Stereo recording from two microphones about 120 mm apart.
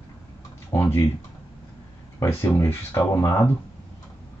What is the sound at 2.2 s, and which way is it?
Speech, 20° left (ahead or behind).